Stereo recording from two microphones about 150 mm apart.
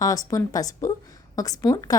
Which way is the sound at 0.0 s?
25° left (ahead or behind).